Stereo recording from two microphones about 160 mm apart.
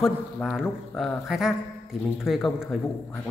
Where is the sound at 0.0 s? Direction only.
Centre (ahead or behind).